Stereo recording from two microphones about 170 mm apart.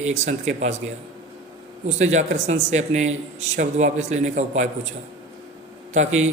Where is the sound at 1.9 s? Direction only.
45° right (ahead or behind).